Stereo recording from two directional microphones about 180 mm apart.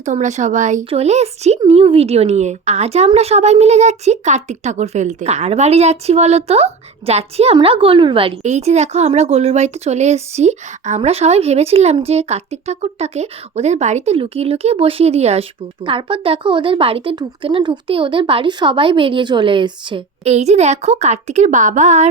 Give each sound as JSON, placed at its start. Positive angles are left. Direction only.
{"t": 0.0, "sound": "speech", "side_deg": -40}